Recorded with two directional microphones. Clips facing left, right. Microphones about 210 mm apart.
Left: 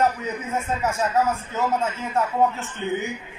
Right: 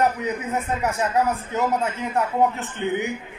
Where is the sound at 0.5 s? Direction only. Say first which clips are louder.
Left 2 dB; 15° right (ahead or behind).